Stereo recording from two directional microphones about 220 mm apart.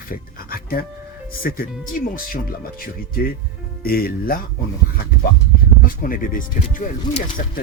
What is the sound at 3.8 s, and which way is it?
Speech, 45° left (ahead or behind).